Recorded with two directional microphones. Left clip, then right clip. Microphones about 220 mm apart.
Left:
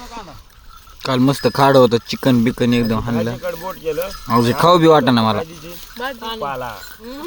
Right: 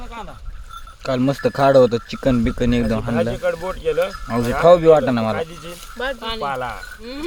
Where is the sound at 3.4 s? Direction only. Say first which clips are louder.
Right 3 dB; 35° right (ahead or behind).